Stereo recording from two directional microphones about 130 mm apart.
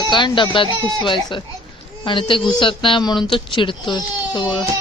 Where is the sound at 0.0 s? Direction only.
35° left (ahead or behind).